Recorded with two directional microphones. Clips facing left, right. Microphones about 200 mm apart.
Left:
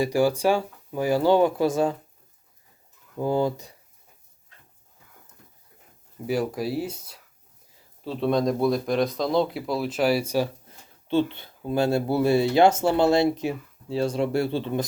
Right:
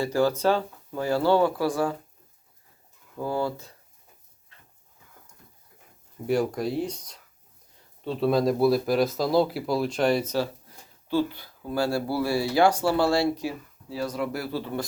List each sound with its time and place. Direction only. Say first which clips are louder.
0.0 s speech: left 2 dB; 15° left (ahead or behind)
3.2 s speech: left 4 dB; 20° left (ahead or behind)
6.2 s speech: right 1 dB; centre (ahead or behind)
11.1 s speech: left 2 dB; 25° left (ahead or behind)